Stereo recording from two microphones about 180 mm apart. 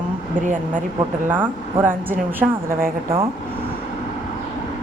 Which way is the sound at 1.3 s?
10° right (ahead or behind).